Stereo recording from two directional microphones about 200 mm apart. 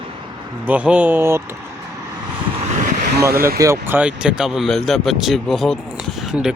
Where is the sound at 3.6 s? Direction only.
10° right (ahead or behind).